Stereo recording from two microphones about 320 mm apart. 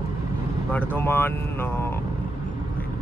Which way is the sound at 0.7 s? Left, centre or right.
Centre.